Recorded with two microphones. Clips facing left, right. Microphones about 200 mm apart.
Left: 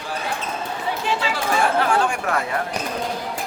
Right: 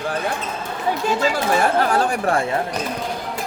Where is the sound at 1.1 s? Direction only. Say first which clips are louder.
Right 4 dB; 45° right (ahead or behind).